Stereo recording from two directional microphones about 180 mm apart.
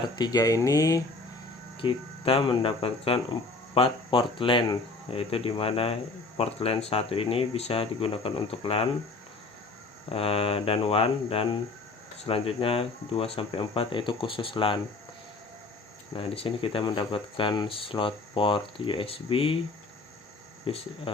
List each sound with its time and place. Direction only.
0.2 s speech: 20° left (ahead or behind)
1.8 s speech: 30° left (ahead or behind)
10.1 s speech: 30° left (ahead or behind)
16.1 s speech: 30° left (ahead or behind)
20.7 s speech: 30° left (ahead or behind)